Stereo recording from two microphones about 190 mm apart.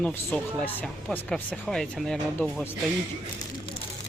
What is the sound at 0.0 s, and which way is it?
Speech, 10° left (ahead or behind).